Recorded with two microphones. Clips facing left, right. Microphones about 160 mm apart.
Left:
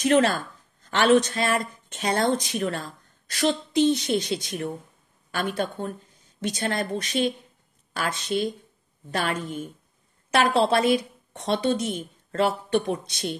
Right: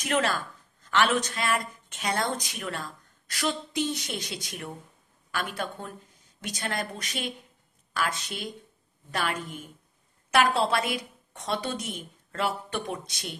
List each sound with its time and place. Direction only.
0.0 s a woman's voice: 30° left (ahead or behind)